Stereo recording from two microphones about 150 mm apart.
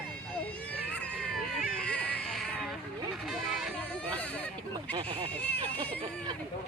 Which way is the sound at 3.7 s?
10° left (ahead or behind).